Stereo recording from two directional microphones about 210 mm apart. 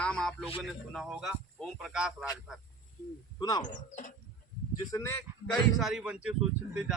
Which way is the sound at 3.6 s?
35° left (ahead or behind).